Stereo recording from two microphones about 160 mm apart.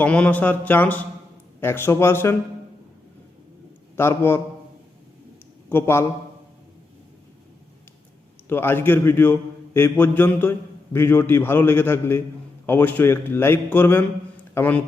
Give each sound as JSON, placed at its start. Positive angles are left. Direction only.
{"t": 0.0, "sound": "a man's voice", "side_deg": 10}
{"t": 3.9, "sound": "a man's voice", "side_deg": 15}
{"t": 5.6, "sound": "a man's voice", "side_deg": 15}
{"t": 8.4, "sound": "a man's voice", "side_deg": 15}